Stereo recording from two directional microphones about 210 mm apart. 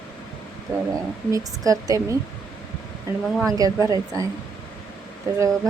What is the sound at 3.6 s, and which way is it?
Speech, 15° right (ahead or behind).